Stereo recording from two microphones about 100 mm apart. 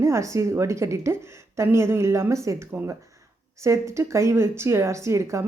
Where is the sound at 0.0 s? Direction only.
30° right (ahead or behind).